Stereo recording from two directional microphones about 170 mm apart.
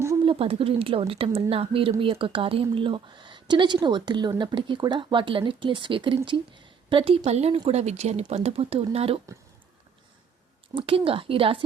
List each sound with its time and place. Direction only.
0.3 s speech: 35° right (ahead or behind)
10.8 s speech: 30° right (ahead or behind)